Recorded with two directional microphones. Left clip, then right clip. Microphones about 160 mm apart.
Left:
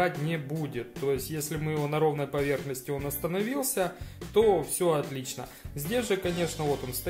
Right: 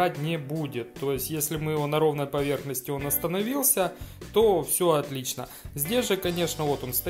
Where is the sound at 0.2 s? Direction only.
30° right (ahead or behind).